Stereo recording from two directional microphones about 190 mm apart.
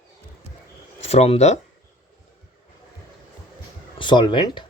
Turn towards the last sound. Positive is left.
turn(degrees=25)  # may be behind; listen again after turning